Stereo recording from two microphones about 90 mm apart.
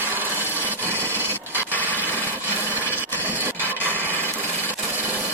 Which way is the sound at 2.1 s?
25° left (ahead or behind).